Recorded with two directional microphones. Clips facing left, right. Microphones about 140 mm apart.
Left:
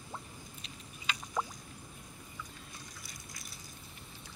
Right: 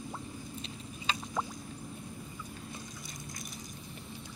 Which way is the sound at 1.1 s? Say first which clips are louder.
Right 4 dB; 25° right (ahead or behind).